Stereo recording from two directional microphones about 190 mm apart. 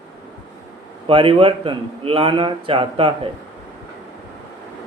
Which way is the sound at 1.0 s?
30° right (ahead or behind).